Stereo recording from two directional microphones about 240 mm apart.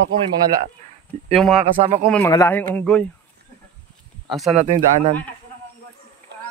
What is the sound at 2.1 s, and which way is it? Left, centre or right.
Speech, centre.